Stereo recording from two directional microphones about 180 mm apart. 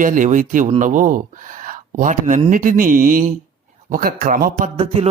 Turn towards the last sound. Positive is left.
turn(degrees=-35)  # may be behind; listen again after turning